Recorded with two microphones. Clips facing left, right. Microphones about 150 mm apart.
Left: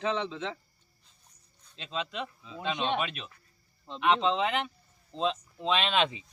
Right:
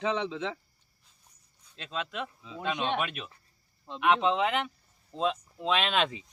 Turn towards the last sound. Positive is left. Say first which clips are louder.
# even
turn(degrees=0)  # may be behind; listen again after turning